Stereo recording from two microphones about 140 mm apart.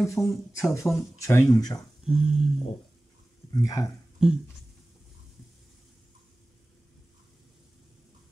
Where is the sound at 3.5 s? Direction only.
25° left (ahead or behind).